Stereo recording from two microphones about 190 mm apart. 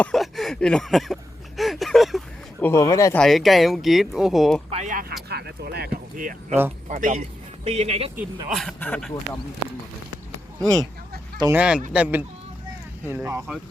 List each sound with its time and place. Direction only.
0.0 s a sound: centre (ahead or behind)
2.6 s speech: 15° left (ahead or behind)
3.2 s speech: centre (ahead or behind)
4.7 s speech: 40° right (ahead or behind)
5.3 s speech: 60° right (ahead or behind); by 8.1 s 35° right (ahead or behind)
8.4 s speech: centre (ahead or behind)
11.5 s speech: 5° right (ahead or behind)